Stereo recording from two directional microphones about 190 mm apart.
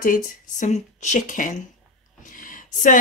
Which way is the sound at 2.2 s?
45° left (ahead or behind).